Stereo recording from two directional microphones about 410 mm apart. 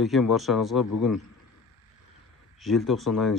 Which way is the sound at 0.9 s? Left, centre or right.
Left.